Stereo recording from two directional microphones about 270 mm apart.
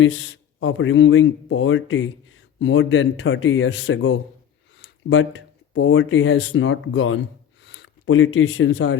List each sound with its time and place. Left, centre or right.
0.0 s speech: left